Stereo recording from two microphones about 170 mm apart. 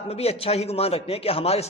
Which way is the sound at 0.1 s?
35° left (ahead or behind).